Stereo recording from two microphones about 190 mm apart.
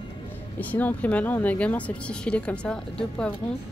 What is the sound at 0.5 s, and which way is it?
A woman's voice, 10° left (ahead or behind).